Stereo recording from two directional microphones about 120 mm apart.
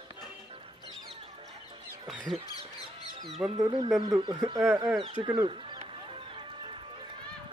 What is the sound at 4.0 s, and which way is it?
Speech, 35° right (ahead or behind).